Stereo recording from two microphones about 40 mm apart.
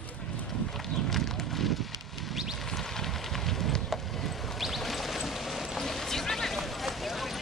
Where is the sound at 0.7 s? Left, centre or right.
Centre.